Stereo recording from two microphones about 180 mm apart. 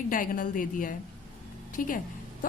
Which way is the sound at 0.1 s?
50° left (ahead or behind).